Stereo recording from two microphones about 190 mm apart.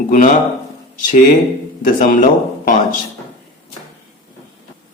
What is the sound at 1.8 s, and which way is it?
Speech, 45° left (ahead or behind).